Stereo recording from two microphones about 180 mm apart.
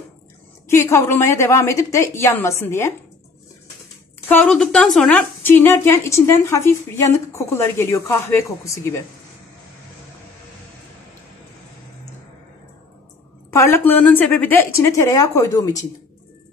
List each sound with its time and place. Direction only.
0.7 s a woman's voice: 15° left (ahead or behind)
4.3 s a woman's voice: 5° left (ahead or behind)
13.5 s a woman's voice: 15° left (ahead or behind)